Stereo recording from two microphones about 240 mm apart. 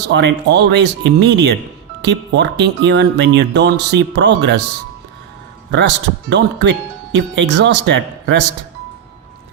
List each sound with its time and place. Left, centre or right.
0.1 s speech: right
6.3 s speech: right